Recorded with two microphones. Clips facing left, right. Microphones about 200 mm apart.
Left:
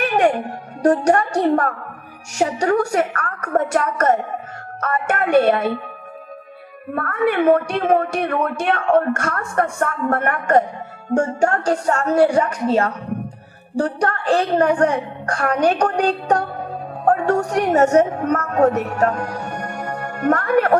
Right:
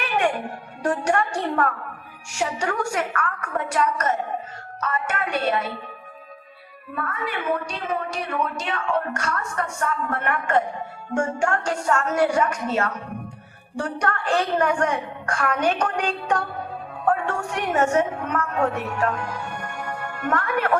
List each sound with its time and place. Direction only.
0.0 s music: 40° left (ahead or behind)
0.8 s a woman's voice: 40° left (ahead or behind); by 5.7 s 55° left (ahead or behind)
6.9 s a woman's voice: 55° left (ahead or behind); by 20.7 s 40° left (ahead or behind)